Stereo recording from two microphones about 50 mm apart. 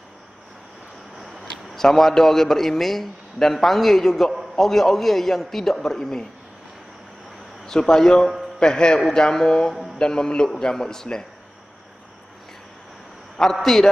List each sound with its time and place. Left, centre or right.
1.2 s a man's voice: centre
7.6 s a man's voice: centre
13.4 s a man's voice: centre